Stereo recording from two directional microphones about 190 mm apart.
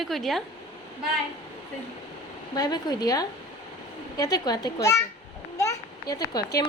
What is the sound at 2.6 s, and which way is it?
A child's voice, 20° left (ahead or behind).